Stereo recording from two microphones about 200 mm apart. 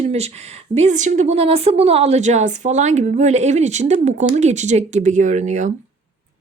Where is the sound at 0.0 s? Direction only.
30° right (ahead or behind).